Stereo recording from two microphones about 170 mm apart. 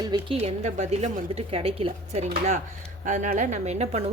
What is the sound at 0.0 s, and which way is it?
Speech, 25° right (ahead or behind).